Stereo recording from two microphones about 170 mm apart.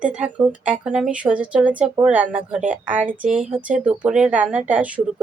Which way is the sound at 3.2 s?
45° right (ahead or behind).